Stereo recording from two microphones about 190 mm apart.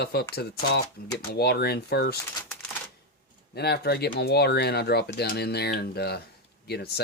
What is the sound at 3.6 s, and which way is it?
Speech, 60° left (ahead or behind).